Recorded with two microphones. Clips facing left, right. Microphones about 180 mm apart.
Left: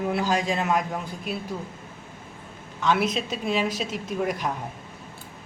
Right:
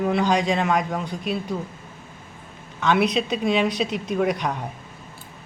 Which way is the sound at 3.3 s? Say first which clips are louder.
Right 4 dB; 5° left (ahead or behind).